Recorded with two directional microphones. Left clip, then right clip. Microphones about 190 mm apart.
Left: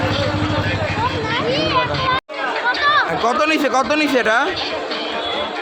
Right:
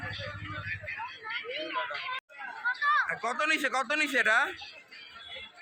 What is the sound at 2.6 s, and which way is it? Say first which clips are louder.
Chatter: left 10 dB; 20° left (ahead or behind).